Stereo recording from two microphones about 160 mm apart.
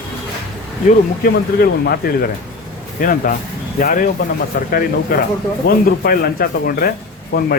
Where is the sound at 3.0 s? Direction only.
60° left (ahead or behind).